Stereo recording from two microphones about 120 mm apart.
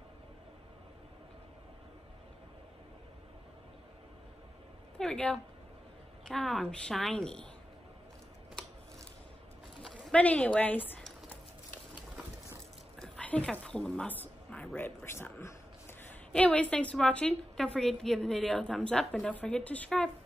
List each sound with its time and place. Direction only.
4.9 s a woman's voice: 5° left (ahead or behind)
10.0 s a woman's voice: 10° left (ahead or behind)
13.0 s a woman's voice: 10° left (ahead or behind)
15.1 s a sound: 15° left (ahead or behind)
16.3 s a woman's voice: 10° left (ahead or behind)